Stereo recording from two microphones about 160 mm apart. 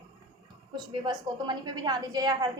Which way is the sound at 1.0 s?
25° right (ahead or behind).